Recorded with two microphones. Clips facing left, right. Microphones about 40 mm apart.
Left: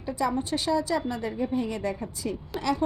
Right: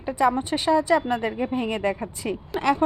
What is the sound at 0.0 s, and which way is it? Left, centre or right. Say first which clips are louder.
A woman's voice: right 6 dB; right.